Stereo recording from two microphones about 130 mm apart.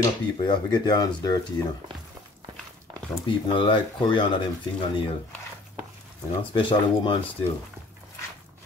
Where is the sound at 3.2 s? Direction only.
40° left (ahead or behind).